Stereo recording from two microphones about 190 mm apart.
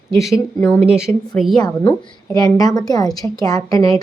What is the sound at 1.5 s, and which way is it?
A woman's voice, 20° left (ahead or behind).